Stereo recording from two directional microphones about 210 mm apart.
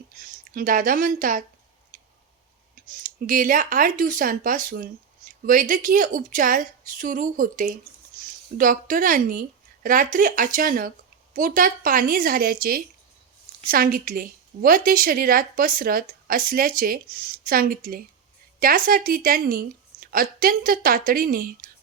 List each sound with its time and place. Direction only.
0.1 s speech: 40° right (ahead or behind)
1.9 s a sound: 40° right (ahead or behind)
2.8 s a woman's voice: 40° right (ahead or behind)